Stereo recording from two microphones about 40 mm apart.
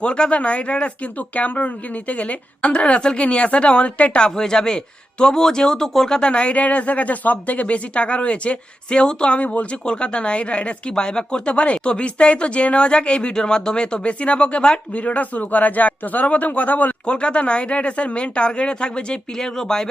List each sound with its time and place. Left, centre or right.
0.0 s a woman's voice: left
1.4 s a woman's voice: left
4.2 s speech: centre
6.1 s speech: left
10.9 s a woman's voice: centre
11.5 s a woman's voice: left
14.1 s a woman's voice: left
14.9 s speech: left
17.1 s a woman's voice: left